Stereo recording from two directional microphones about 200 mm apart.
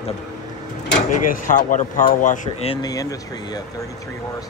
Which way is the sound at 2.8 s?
20° left (ahead or behind).